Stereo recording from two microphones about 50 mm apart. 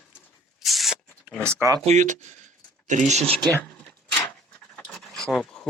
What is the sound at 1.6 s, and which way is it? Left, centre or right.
Speech, right.